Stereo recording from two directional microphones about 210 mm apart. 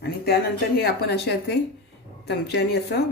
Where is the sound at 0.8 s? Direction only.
50° left (ahead or behind).